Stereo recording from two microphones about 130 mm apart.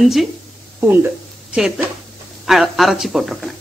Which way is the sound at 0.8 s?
15° right (ahead or behind).